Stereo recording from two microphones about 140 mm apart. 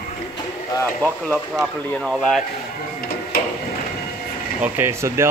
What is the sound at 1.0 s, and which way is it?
Speech, 5° right (ahead or behind).